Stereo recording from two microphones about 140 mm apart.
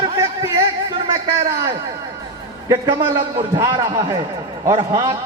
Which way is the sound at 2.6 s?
30° right (ahead or behind).